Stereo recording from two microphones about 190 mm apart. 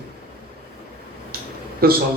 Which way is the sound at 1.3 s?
55° right (ahead or behind).